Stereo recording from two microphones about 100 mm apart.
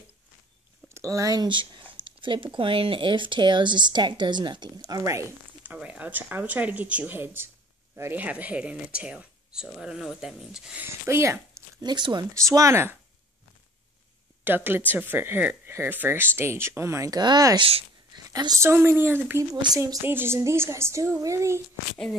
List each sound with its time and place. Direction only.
0.8 s speech: 30° right (ahead or behind)
5.7 s speech: 15° right (ahead or behind)
10.8 s speech: 25° right (ahead or behind)
11.8 s speech: 45° right (ahead or behind)
12.4 s speech: 30° right (ahead or behind)
14.4 s speech: 20° right (ahead or behind)
17.2 s speech: 45° right (ahead or behind)
17.6 s speech: 70° right (ahead or behind)
18.1 s a sound: 45° right (ahead or behind)
18.6 s speech: 25° right (ahead or behind)
19.5 s speech: 50° right (ahead or behind)
19.8 s speech: 25° right (ahead or behind)